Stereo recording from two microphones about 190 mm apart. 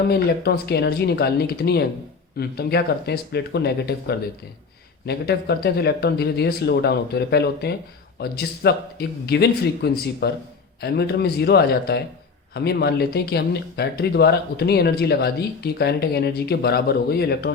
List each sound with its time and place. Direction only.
0.0 s speech: 55° left (ahead or behind)